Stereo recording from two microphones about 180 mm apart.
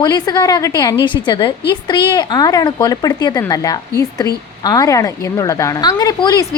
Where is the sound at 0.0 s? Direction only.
20° left (ahead or behind).